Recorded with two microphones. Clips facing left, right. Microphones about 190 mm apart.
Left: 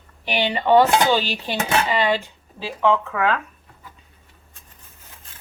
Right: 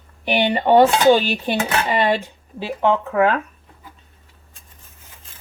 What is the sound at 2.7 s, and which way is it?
Dishes, 40° right (ahead or behind).